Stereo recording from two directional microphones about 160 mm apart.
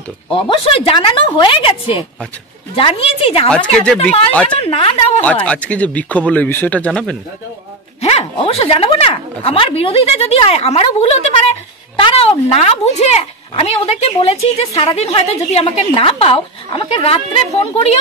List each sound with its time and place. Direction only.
0.3 s speech: 35° left (ahead or behind)
2.7 s speech: 35° left (ahead or behind)
3.4 s speech: 5° left (ahead or behind)
4.6 s speech: 35° left (ahead or behind)
5.2 s speech: 10° left (ahead or behind)
8.0 s speech: 40° left (ahead or behind)